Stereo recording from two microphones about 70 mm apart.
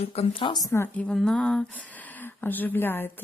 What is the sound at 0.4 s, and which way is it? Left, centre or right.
Speech, left.